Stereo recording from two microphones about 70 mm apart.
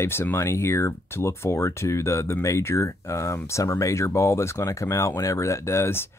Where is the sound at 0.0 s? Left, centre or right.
Left.